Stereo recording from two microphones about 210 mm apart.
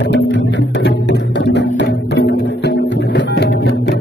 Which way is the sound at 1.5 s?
55° left (ahead or behind).